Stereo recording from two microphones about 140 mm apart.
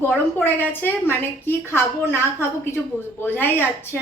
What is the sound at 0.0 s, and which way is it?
A woman's voice, 15° left (ahead or behind).